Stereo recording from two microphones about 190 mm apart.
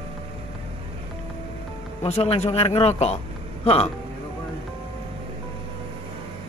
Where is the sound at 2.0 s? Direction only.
35° left (ahead or behind).